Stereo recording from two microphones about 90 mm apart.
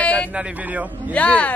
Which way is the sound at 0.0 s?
15° left (ahead or behind).